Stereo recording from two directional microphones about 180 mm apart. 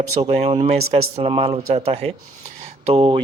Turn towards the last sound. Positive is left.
turn(degrees=-30)  # may be behind; listen again after turning